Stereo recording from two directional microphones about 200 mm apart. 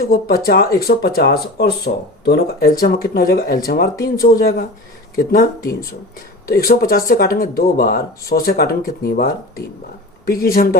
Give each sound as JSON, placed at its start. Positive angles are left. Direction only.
{"t": 0.0, "sound": "speech", "side_deg": 50}